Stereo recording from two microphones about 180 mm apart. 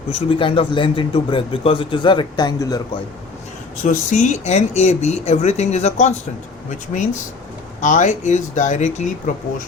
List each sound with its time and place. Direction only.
0.1 s a man's voice: 30° left (ahead or behind)
3.8 s speech: 45° left (ahead or behind)
7.8 s speech: 45° left (ahead or behind)